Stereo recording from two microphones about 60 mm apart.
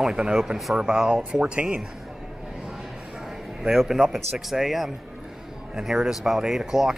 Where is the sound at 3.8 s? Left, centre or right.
Centre.